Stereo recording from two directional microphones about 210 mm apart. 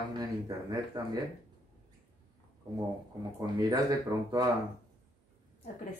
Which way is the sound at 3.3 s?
15° right (ahead or behind).